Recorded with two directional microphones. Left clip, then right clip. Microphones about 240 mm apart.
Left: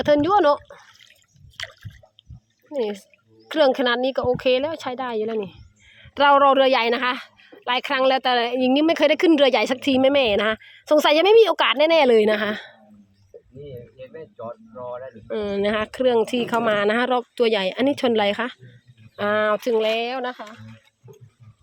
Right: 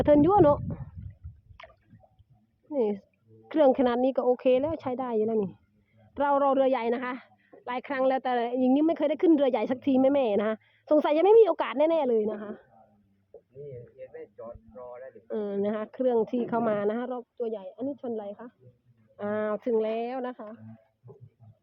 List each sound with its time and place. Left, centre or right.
0.0 s speech: centre
2.7 s a woman's voice: centre
12.0 s a woman's voice: centre
14.3 s a woman's voice: centre
17.1 s speech: left
17.5 s speech: left
19.1 s a woman's voice: centre